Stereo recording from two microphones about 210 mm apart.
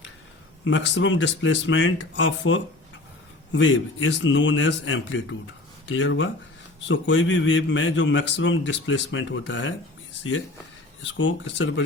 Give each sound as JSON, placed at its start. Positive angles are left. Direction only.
{"t": 0.6, "sound": "a man's voice", "side_deg": 60}
{"t": 11.0, "sound": "a man's voice", "side_deg": 60}